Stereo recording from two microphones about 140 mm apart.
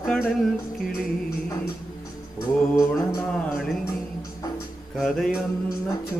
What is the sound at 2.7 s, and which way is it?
Mantra, 20° left (ahead or behind).